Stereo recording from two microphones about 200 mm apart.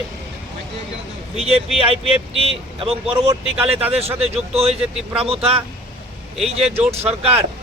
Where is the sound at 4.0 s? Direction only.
30° right (ahead or behind).